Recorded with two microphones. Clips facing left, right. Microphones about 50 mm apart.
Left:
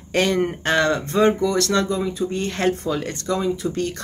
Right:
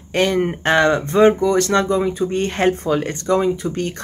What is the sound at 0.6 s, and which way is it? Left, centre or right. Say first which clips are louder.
Speech: right 6 dB; right.